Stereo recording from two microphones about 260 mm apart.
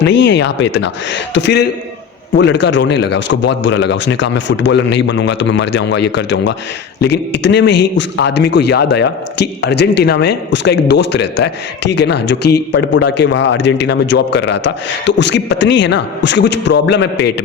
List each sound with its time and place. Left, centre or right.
0.0 s a man's voice: left